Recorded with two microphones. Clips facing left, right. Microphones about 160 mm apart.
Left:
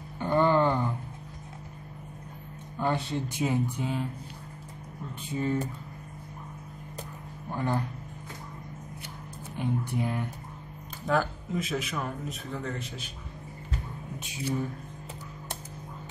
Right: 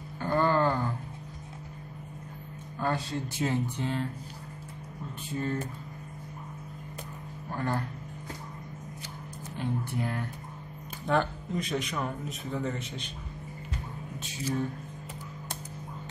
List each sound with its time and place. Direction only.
0.2 s a sound: 20° left (ahead or behind)
2.8 s speech: 20° left (ahead or behind)
5.3 s speech: 15° left (ahead or behind)
7.4 s speech: 15° left (ahead or behind)
9.6 s speech: 15° left (ahead or behind)
11.1 s speech: 5° left (ahead or behind)